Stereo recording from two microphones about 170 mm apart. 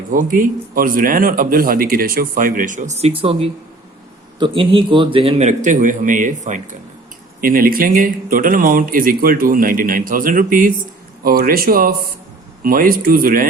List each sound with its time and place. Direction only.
0.1 s a man's voice: 55° right (ahead or behind)